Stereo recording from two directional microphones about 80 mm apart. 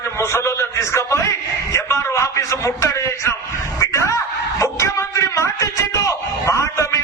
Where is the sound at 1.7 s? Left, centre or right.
Left.